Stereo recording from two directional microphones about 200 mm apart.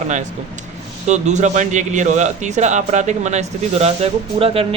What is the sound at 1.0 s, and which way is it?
A man's voice, 35° right (ahead or behind).